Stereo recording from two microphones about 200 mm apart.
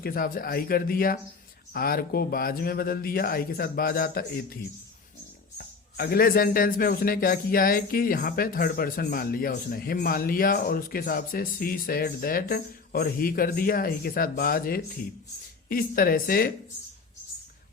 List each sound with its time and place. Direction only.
0.0 s a man's voice: 45° left (ahead or behind)
5.5 s a man's voice: 50° left (ahead or behind)